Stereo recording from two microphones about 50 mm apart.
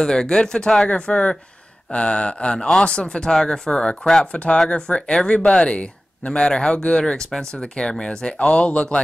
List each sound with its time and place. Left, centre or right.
0.0 s speech: centre